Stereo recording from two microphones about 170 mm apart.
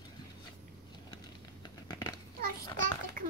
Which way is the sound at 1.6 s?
25° left (ahead or behind).